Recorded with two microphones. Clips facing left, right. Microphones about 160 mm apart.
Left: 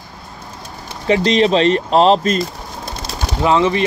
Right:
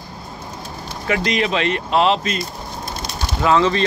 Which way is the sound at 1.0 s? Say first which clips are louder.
Left 7 dB; 30° left (ahead or behind).